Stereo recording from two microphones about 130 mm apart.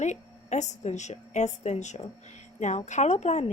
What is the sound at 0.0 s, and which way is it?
A woman's voice, 65° left (ahead or behind).